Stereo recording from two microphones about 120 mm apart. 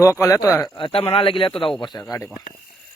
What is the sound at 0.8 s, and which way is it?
Speech, 50° left (ahead or behind).